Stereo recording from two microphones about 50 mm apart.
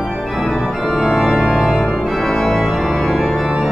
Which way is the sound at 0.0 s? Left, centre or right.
Centre.